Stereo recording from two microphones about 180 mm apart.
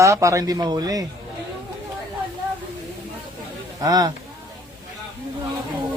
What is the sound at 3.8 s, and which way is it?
Speech, 20° right (ahead or behind).